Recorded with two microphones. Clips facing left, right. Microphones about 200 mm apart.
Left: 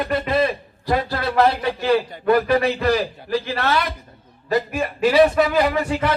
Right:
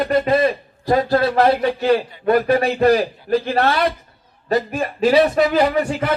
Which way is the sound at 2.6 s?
50° right (ahead or behind).